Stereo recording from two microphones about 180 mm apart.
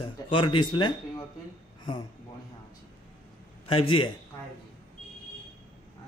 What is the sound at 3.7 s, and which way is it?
Speech, 30° left (ahead or behind).